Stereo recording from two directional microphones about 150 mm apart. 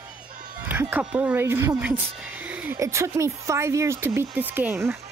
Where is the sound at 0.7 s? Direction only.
10° right (ahead or behind).